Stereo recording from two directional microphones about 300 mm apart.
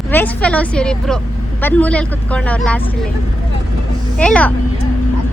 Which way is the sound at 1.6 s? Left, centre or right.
Centre.